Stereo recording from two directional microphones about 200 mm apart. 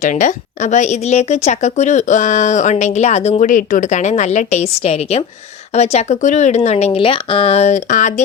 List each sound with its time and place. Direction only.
0.0 s speech: 40° left (ahead or behind)